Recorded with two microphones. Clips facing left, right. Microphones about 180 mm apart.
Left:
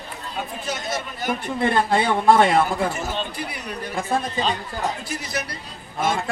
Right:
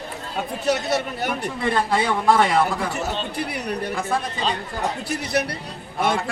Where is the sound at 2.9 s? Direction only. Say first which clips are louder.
Right 1 dB; 70° right (ahead or behind).